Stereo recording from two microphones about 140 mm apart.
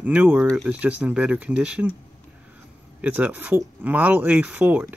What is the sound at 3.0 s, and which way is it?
Speech, 10° right (ahead or behind).